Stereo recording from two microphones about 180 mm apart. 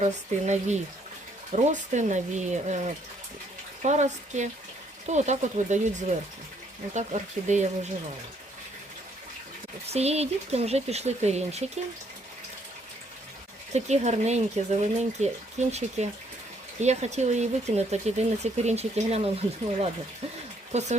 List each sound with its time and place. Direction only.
0.0 s speech: 40° right (ahead or behind)
9.8 s speech: 35° right (ahead or behind)
13.7 s speech: 40° right (ahead or behind)